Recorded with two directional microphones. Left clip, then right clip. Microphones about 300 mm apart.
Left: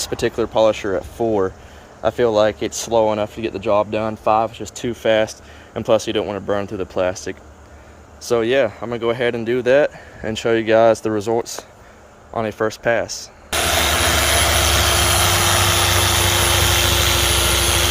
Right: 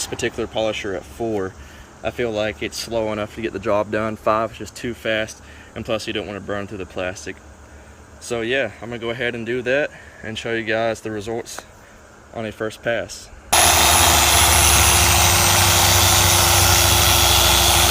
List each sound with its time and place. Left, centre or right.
0.1 s speech: centre
3.6 s speech: centre
3.9 s speech: centre
13.5 s vehicle: centre